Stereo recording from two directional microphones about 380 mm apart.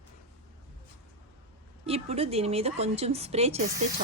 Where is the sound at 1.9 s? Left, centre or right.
Centre.